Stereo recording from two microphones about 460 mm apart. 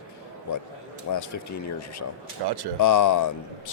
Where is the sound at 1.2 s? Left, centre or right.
Left.